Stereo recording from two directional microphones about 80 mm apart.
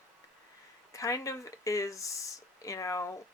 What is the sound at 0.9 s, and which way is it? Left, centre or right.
Speech, left.